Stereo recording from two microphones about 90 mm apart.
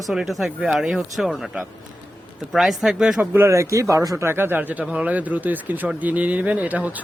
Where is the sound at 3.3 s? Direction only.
30° right (ahead or behind).